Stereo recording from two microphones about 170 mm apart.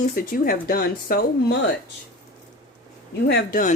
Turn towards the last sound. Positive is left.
turn(degrees=75)  # may be behind; listen again after turning